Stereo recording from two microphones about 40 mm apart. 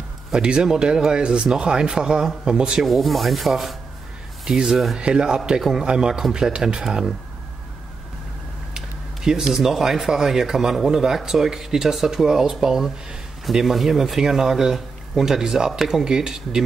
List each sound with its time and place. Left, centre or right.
0.3 s speech: right
2.8 s rub: centre
4.5 s speech: centre
4.9 s speech: right
8.7 s speech: centre